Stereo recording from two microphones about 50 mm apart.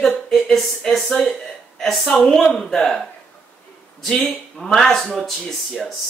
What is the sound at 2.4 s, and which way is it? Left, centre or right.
Speech, centre.